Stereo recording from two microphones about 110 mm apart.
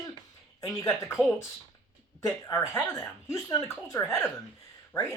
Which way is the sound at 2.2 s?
30° left (ahead or behind).